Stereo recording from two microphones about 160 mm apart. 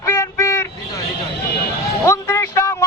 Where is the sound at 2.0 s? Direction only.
15° left (ahead or behind).